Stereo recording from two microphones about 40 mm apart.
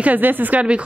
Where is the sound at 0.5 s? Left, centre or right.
Right.